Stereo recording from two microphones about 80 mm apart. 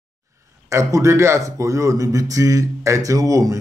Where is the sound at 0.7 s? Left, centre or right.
Right.